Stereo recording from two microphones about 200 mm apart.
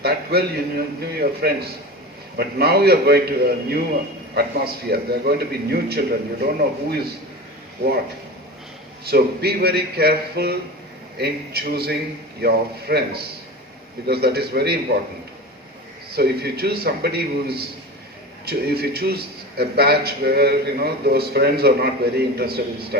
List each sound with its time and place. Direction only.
0.0 s a man's voice: 50° right (ahead or behind)
9.0 s a man's voice: 50° right (ahead or behind)
14.1 s a man's voice: 55° right (ahead or behind)
16.1 s a man's voice: 55° right (ahead or behind)